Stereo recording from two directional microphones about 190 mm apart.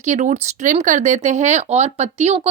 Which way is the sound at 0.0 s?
40° right (ahead or behind).